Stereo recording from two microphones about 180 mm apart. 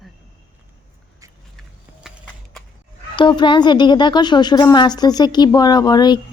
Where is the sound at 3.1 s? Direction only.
25° left (ahead or behind).